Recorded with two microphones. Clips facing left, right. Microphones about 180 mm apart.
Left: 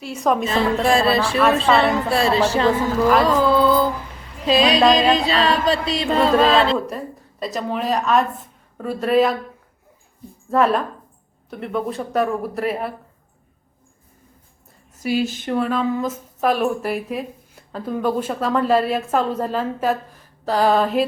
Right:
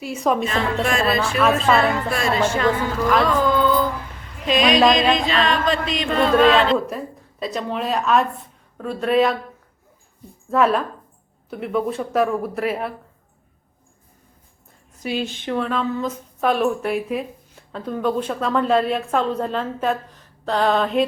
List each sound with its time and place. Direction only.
0.0 s a woman's voice: 5° right (ahead or behind)
0.9 s speech: 30° left (ahead or behind)
3.2 s music: 35° left (ahead or behind)
4.4 s speech: 30° left (ahead or behind)
6.7 s a woman's voice: centre (ahead or behind)
10.5 s a woman's voice: centre (ahead or behind)
15.0 s a sound: 5° left (ahead or behind)
16.4 s a woman's voice: centre (ahead or behind)